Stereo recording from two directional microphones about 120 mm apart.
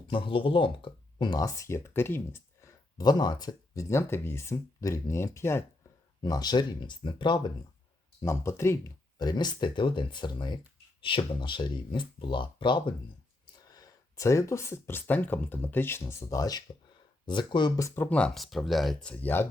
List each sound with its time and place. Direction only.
0.1 s speech: 45° left (ahead or behind); by 2.7 s 20° left (ahead or behind)
3.0 s speech: 35° left (ahead or behind)
6.2 s speech: 35° left (ahead or behind)
8.2 s speech: 20° left (ahead or behind)
9.1 s speech: 35° left (ahead or behind)
13.6 s speech: 30° left (ahead or behind); by 18.3 s 15° left (ahead or behind)
18.3 s speech: centre (ahead or behind)